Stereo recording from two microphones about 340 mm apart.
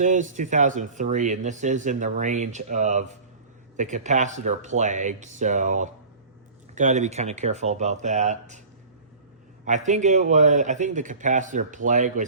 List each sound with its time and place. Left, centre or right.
0.0 s speech: right
9.6 s speech: right